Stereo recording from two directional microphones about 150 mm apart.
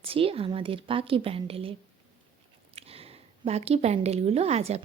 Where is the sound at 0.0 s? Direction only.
40° right (ahead or behind).